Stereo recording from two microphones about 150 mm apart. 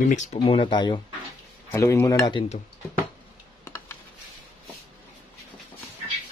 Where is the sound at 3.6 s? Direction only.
15° left (ahead or behind).